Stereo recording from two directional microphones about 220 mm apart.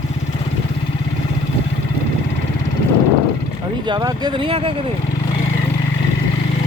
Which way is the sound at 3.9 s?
20° right (ahead or behind).